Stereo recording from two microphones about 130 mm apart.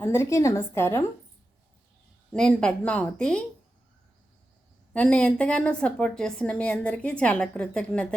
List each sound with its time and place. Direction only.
0.0 s a woman's voice: 20° left (ahead or behind)
2.3 s a woman's voice: 5° left (ahead or behind)
4.9 s a woman's voice: 10° left (ahead or behind)